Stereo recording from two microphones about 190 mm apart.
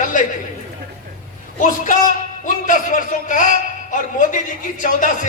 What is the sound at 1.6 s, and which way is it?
A man's voice, 45° left (ahead or behind).